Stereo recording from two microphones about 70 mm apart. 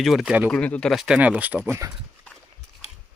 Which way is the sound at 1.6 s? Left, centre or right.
Right.